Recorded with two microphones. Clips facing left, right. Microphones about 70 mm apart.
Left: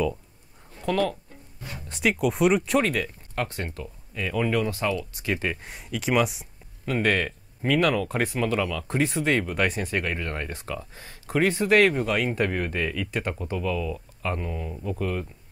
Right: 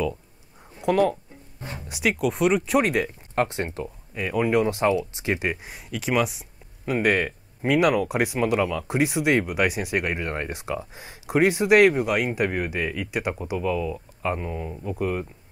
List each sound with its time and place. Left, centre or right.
0.7 s speech: right
1.8 s speech: centre
2.8 s speech: right
4.2 s speech: centre
5.6 s speech: centre
6.9 s speech: centre